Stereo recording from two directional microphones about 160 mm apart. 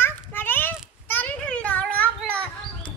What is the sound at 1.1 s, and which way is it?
Children playing, 10° left (ahead or behind).